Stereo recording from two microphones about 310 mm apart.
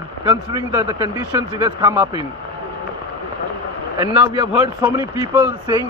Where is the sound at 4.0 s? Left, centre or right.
Centre.